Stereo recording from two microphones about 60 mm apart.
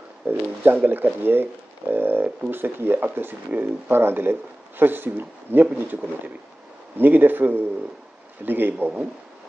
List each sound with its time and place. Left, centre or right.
0.3 s speech: right
7.0 s speech: right